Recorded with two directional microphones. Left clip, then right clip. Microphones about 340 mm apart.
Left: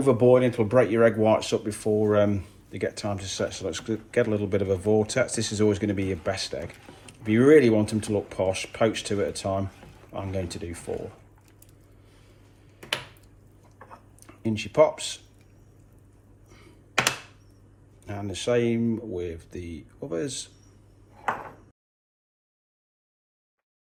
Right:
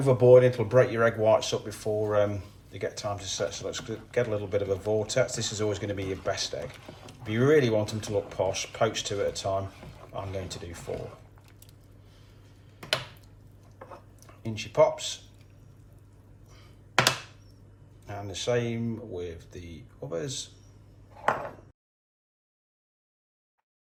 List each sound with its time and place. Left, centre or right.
0.1 s speech: centre
14.3 s speech: left
18.0 s speech: left